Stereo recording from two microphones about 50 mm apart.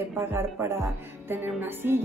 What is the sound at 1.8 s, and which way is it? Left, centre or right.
Music, right.